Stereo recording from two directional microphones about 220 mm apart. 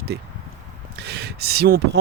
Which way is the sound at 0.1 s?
50° right (ahead or behind).